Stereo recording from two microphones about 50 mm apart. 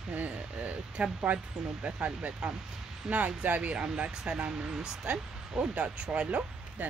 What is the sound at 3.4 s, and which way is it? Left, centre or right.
Speech, right.